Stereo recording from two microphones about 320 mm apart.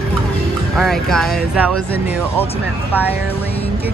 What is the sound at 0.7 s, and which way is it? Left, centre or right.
Speech, centre.